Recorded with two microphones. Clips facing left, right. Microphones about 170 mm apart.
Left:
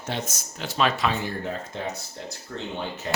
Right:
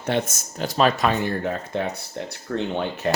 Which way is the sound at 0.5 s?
40° right (ahead or behind).